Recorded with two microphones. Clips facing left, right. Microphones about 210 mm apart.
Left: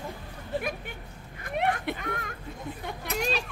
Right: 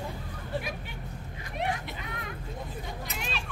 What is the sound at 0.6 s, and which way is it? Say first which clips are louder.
Speech: left 5 dB; 50° left (ahead or behind).